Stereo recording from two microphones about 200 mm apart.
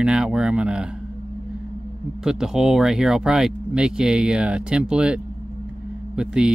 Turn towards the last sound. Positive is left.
turn(degrees=-5)  # may be behind; listen again after turning